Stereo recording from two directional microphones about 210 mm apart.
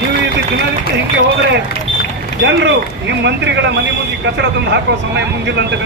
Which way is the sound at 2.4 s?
55° right (ahead or behind).